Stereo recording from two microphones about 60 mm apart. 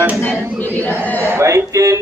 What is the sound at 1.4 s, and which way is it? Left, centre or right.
Speech, right.